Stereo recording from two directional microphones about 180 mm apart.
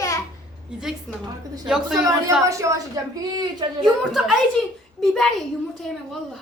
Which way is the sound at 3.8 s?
Centre (ahead or behind).